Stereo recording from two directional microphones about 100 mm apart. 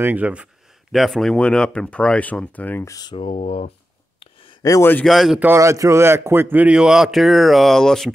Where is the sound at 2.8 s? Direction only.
40° left (ahead or behind).